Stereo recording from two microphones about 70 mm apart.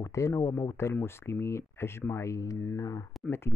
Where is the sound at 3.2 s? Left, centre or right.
Left.